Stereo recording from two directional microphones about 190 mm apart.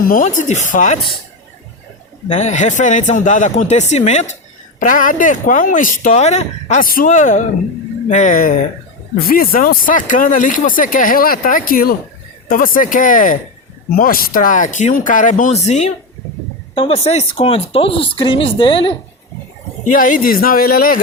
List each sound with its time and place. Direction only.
0.0 s speech: 45° left (ahead or behind)
2.3 s speech: 40° left (ahead or behind)
19.8 s speech: 45° left (ahead or behind)